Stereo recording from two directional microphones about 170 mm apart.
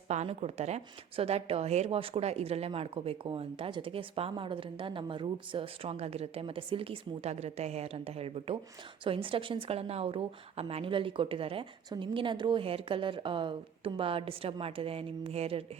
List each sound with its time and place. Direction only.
0.1 s speech: 40° right (ahead or behind)